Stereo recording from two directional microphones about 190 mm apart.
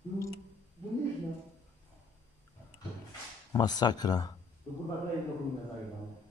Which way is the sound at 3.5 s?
20° left (ahead or behind).